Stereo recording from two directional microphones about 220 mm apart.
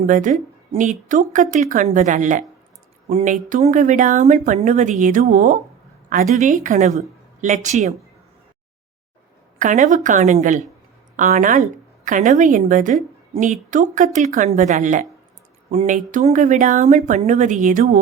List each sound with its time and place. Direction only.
0.0 s a woman's voice: 35° right (ahead or behind)
9.6 s a woman's voice: 35° right (ahead or behind)